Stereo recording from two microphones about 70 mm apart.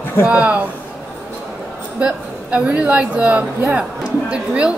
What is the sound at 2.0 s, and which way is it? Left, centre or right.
A woman's voice, centre.